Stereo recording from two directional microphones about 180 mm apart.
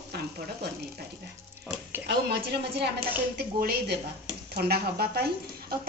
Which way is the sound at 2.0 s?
65° right (ahead or behind).